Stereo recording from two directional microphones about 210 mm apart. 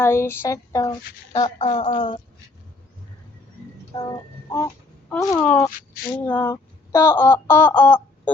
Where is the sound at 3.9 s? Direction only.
25° left (ahead or behind).